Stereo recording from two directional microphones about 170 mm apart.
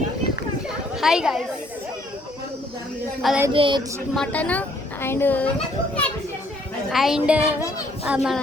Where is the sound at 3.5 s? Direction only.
30° right (ahead or behind).